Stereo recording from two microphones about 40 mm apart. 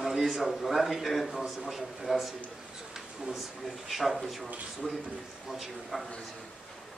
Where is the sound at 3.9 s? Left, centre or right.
Centre.